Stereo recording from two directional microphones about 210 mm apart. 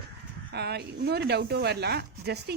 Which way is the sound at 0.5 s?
50° right (ahead or behind).